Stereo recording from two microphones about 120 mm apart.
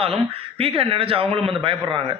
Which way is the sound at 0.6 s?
50° right (ahead or behind).